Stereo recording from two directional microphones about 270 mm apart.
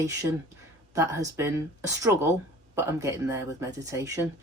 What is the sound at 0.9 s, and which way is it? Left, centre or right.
Speech, centre.